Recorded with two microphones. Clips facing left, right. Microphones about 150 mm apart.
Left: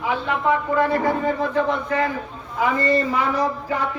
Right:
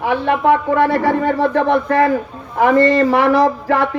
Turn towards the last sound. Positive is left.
turn(degrees=-90)